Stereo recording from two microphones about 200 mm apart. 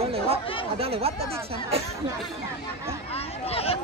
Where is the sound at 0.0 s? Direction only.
30° right (ahead or behind).